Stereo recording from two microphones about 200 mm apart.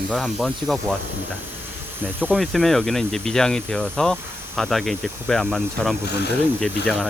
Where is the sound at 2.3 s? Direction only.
Centre (ahead or behind).